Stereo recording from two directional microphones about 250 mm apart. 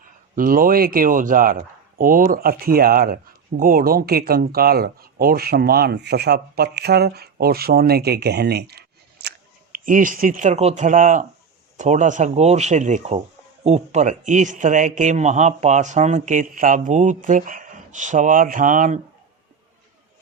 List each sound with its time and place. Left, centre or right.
0.0 s speech: right